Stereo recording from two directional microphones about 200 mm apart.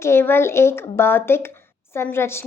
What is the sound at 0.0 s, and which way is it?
A woman's voice, 10° left (ahead or behind).